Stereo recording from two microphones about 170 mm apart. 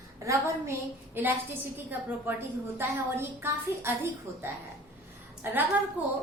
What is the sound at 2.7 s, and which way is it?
A woman's voice, 15° right (ahead or behind).